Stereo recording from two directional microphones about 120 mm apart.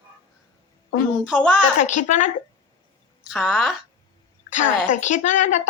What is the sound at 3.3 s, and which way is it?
Speech, 5° right (ahead or behind).